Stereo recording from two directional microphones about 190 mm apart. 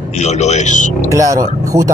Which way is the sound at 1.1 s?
15° right (ahead or behind).